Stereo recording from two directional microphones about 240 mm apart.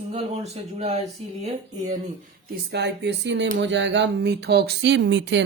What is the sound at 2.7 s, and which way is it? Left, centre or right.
Speech, right.